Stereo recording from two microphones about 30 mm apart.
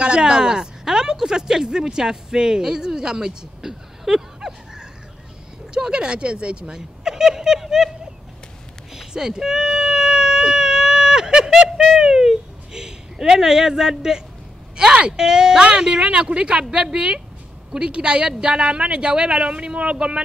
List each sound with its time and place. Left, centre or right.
0.0 s speech: right
3.3 s a sound: centre
5.8 s a woman's voice: right
6.7 s speech: centre
9.1 s speech: right
9.4 s baby cry: centre
12.1 s a sound: centre
14.8 s speech: right
15.1 s a woman's voice: right